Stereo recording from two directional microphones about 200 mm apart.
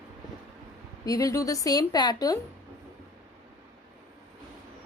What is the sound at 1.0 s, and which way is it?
A woman's voice, 15° left (ahead or behind).